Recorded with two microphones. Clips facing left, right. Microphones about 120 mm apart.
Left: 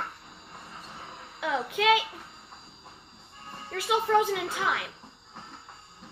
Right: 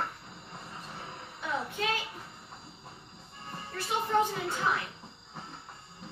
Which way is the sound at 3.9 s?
90° left.